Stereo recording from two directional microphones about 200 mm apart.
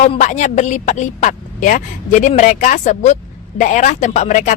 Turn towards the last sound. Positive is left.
turn(degrees=40)  # may be behind; listen again after turning